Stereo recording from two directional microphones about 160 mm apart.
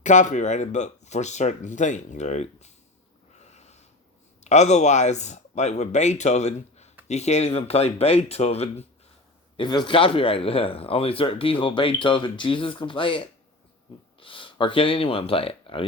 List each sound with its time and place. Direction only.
0.0 s speech: 50° left (ahead or behind)
3.4 s snort: 45° left (ahead or behind)
4.4 s speech: 45° left (ahead or behind)
9.6 s speech: 30° left (ahead or behind)